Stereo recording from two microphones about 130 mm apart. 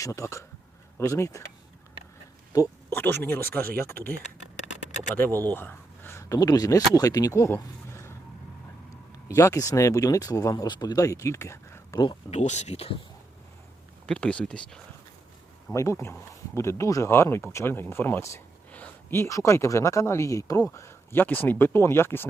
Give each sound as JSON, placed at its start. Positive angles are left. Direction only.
{"t": 0.0, "sound": "speech", "side_deg": 25}
{"t": 2.9, "sound": "speech", "side_deg": 15}
{"t": 5.5, "sound": "speech", "side_deg": 15}
{"t": 9.3, "sound": "speech", "side_deg": 25}
{"t": 12.3, "sound": "speech", "side_deg": 60}
{"t": 14.1, "sound": "speech", "side_deg": 10}
{"t": 15.7, "sound": "speech", "side_deg": 20}